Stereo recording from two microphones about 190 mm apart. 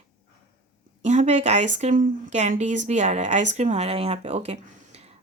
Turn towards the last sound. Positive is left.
turn(degrees=-35)  # may be behind; listen again after turning